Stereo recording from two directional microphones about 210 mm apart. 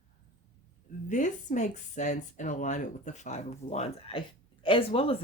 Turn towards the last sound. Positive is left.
turn(degrees=25)  # may be behind; listen again after turning